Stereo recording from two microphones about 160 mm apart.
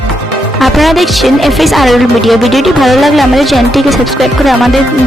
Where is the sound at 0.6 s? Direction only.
Centre (ahead or behind).